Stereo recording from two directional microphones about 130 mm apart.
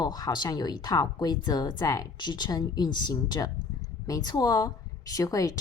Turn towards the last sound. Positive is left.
turn(degrees=25)  # may be behind; listen again after turning